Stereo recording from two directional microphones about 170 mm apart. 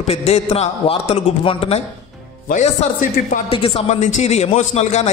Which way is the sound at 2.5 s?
45° left (ahead or behind).